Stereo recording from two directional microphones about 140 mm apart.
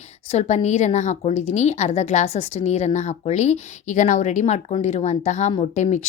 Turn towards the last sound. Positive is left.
turn(degrees=55)  # may be behind; listen again after turning